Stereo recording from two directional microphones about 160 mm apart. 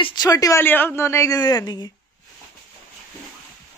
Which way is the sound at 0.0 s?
25° left (ahead or behind).